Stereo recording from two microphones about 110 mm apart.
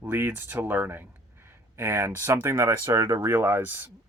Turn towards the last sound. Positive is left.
turn(degrees=-15)  # may be behind; listen again after turning